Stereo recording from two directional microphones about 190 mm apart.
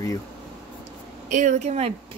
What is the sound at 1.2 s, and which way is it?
Speech, 40° right (ahead or behind).